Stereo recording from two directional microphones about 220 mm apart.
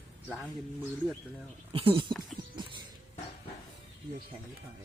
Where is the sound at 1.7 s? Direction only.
25° right (ahead or behind).